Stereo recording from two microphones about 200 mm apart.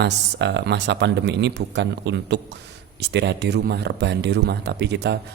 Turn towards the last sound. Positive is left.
turn(degrees=-55)  # may be behind; listen again after turning